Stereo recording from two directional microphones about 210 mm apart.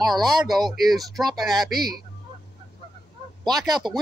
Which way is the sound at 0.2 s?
Centre (ahead or behind).